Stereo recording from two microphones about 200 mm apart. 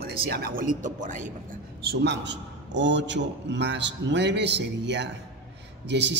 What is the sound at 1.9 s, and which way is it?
A man's voice, 60° right (ahead or behind).